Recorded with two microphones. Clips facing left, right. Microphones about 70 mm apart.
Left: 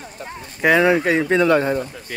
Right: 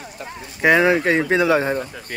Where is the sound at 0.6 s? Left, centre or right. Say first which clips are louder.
Even; centre.